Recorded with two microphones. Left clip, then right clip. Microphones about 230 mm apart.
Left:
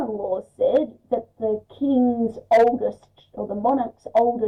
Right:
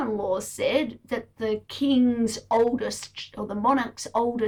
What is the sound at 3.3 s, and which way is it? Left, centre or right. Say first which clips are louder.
Speech: left 2 dB; right.